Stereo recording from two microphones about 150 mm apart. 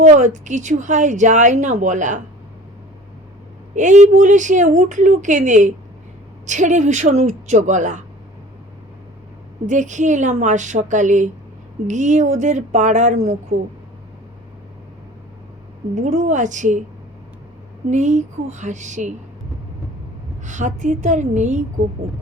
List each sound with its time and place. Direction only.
0.0 s speech: 55° right (ahead or behind)
3.8 s speech: 55° right (ahead or behind)
9.6 s speech: 55° right (ahead or behind)
16.0 s speech: 55° right (ahead or behind)
17.9 s speech: 50° right (ahead or behind)
20.4 s speech: 55° right (ahead or behind)